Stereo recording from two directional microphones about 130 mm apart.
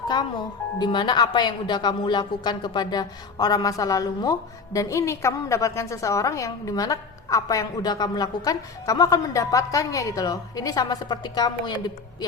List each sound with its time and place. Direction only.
0.1 s speech: 35° left (ahead or behind)